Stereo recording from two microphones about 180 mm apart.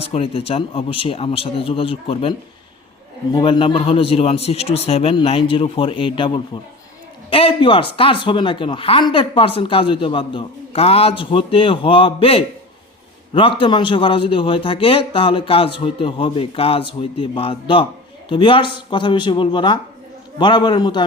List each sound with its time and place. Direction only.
0.0 s speech: 35° left (ahead or behind)
3.3 s speech: 25° left (ahead or behind)